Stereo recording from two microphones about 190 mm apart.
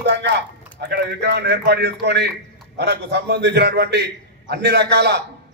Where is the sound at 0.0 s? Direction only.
65° right (ahead or behind).